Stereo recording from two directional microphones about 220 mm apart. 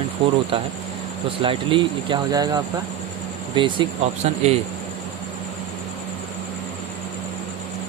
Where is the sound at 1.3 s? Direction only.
25° right (ahead or behind).